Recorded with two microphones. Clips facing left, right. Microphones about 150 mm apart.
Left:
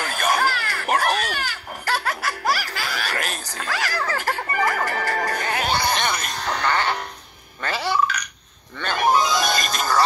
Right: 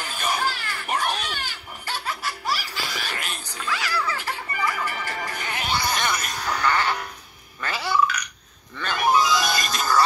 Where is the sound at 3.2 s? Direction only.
45° left (ahead or behind).